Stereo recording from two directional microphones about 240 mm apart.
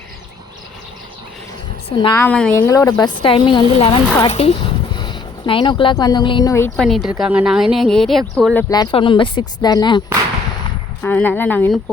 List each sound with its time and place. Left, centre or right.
2.0 s speech: centre
2.2 s a woman's voice: centre
6.7 s a woman's voice: centre
8.7 s speech: centre
11.0 s speech: centre